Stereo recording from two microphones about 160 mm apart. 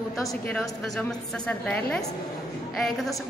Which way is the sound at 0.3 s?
5° left (ahead or behind).